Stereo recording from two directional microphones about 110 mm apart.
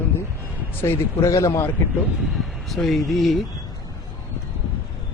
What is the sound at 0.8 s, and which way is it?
Speech, 25° left (ahead or behind).